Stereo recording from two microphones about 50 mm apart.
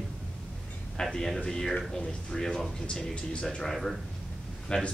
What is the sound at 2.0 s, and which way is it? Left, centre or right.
Speech, left.